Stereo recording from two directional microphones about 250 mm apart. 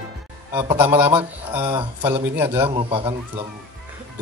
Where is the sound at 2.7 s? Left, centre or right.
Right.